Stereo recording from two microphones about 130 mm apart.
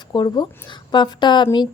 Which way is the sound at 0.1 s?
35° left (ahead or behind).